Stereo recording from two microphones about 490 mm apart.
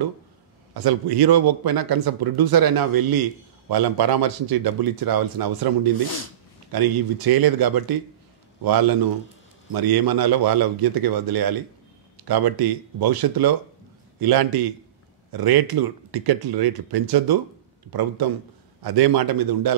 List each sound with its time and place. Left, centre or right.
0.7 s speech: right
6.7 s speech: right